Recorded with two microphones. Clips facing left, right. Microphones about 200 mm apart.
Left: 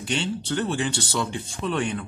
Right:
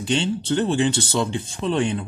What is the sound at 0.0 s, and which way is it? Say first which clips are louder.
Speech: right 5 dB; 25° right (ahead or behind).